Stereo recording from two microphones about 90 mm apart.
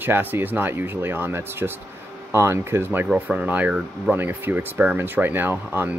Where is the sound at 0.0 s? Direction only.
20° right (ahead or behind).